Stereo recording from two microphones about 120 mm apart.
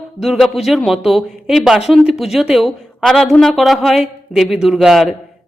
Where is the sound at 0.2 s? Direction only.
Centre (ahead or behind).